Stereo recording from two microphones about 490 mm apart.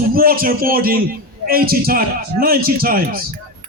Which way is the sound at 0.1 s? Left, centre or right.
Centre.